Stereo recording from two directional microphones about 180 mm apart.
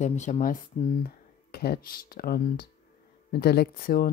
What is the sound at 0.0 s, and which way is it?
Speech, 40° left (ahead or behind).